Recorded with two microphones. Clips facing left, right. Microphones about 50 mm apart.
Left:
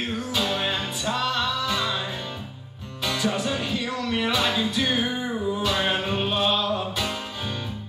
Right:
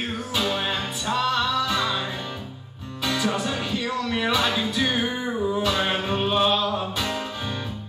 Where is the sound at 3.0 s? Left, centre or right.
Right.